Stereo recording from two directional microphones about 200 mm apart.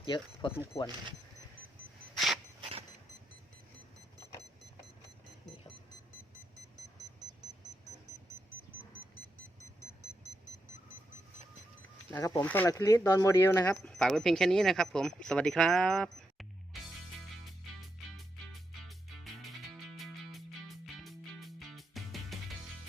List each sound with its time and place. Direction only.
0.0 s speech: 25° left (ahead or behind)
2.1 s a sound: centre (ahead or behind)
12.1 s speech: 15° left (ahead or behind)
13.8 s speech: 5° left (ahead or behind)
18.9 s music: centre (ahead or behind)
20.8 s music: centre (ahead or behind)